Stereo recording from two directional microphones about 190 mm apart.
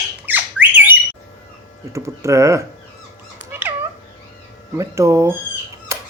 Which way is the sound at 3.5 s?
10° right (ahead or behind).